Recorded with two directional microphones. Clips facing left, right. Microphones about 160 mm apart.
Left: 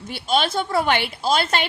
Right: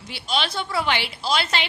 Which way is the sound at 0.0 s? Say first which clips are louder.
Left 5 dB; 50° left (ahead or behind).